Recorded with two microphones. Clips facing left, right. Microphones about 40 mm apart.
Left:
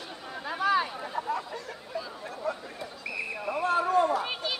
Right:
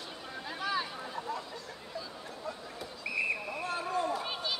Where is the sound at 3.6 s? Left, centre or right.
Left.